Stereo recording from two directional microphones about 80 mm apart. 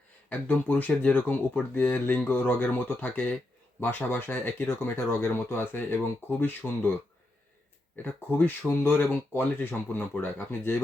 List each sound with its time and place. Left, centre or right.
0.3 s speech: left
8.0 s speech: left